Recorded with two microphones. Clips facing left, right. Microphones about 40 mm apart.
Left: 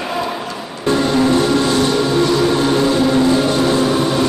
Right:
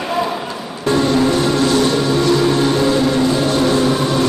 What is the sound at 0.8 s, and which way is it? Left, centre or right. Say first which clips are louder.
Music: even; centre.